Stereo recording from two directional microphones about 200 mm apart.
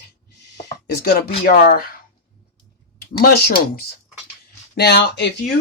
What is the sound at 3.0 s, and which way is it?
Speech, 50° left (ahead or behind).